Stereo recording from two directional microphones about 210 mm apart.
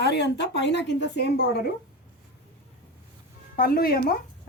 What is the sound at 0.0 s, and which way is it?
A woman's voice, 55° left (ahead or behind).